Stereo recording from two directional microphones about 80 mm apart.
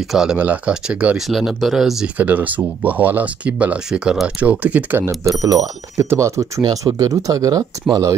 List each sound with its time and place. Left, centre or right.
0.1 s speech: centre
0.4 s speech: centre
2.1 s speech: centre
5.0 s speech: right
6.6 s speech: right